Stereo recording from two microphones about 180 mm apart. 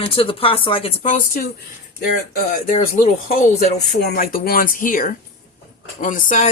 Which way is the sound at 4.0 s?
60° left (ahead or behind).